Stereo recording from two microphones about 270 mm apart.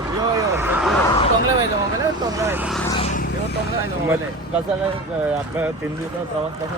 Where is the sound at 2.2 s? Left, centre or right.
Centre.